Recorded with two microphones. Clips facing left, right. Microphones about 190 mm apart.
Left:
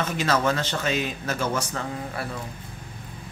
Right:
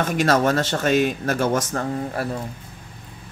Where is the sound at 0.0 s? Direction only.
50° right (ahead or behind).